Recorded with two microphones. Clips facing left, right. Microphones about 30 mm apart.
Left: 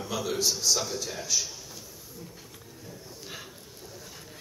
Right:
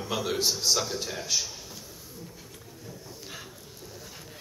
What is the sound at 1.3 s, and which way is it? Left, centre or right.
Speech, right.